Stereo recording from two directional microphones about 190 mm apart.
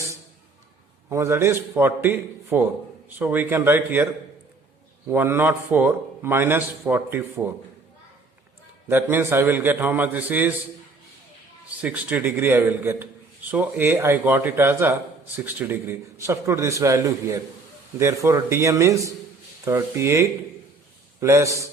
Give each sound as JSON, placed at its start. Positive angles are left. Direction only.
{"t": 1.1, "sound": "a man's voice", "side_deg": -15}
{"t": 8.9, "sound": "a man's voice", "side_deg": -10}
{"t": 11.8, "sound": "a man's voice", "side_deg": -10}